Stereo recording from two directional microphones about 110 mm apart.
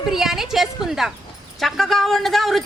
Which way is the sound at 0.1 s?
5° right (ahead or behind).